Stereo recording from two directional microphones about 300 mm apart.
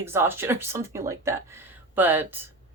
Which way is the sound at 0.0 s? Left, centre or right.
Centre.